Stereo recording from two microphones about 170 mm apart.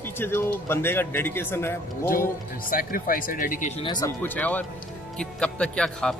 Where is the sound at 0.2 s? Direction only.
15° left (ahead or behind).